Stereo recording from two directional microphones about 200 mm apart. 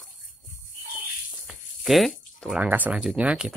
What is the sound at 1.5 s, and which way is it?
Speech, centre (ahead or behind).